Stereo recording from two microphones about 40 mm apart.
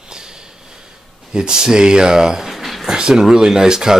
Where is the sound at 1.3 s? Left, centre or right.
Centre.